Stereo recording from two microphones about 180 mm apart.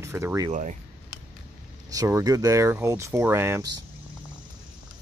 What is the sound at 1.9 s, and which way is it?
Speech, 20° right (ahead or behind).